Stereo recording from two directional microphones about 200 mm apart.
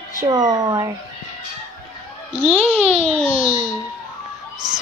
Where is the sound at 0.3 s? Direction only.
20° right (ahead or behind).